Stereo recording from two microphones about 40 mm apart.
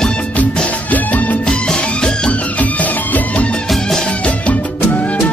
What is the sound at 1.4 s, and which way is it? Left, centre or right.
Music, centre.